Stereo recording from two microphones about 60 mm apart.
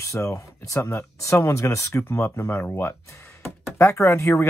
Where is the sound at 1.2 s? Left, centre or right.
Left.